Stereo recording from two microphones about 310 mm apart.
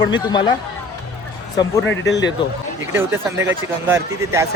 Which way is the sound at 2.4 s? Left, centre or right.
Centre.